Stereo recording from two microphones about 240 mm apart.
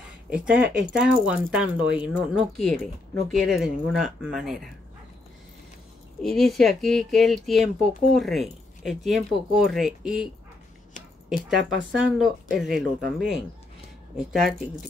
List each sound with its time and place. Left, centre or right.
0.3 s speech: centre
6.2 s speech: centre
11.4 s speech: centre
14.1 s speech: centre